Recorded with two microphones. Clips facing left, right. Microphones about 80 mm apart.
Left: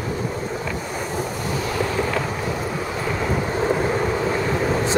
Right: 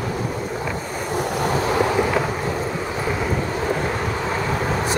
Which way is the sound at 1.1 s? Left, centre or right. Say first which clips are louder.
Right 7 dB; right.